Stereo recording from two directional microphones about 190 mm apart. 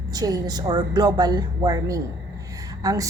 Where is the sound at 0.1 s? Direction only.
20° right (ahead or behind).